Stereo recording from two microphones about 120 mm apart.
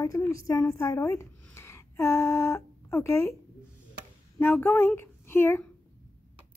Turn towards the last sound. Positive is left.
turn(degrees=20)  # may be behind; listen again after turning